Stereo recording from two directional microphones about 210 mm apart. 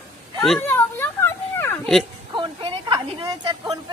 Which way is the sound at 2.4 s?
20° right (ahead or behind).